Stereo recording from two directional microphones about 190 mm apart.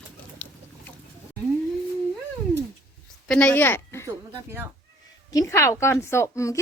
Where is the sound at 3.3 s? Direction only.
5° left (ahead or behind).